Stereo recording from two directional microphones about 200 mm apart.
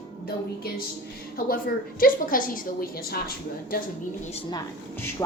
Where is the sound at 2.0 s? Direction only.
45° left (ahead or behind).